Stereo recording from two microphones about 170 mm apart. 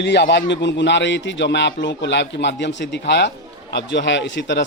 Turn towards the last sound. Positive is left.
turn(degrees=90)